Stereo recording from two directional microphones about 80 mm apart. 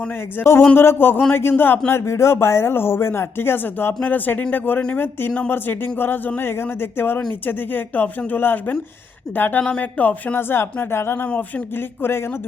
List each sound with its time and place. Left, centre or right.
0.3 s speech: left
11.3 s speech: centre